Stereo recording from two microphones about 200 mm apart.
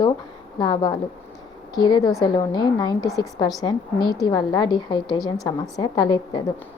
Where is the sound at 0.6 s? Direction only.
20° left (ahead or behind).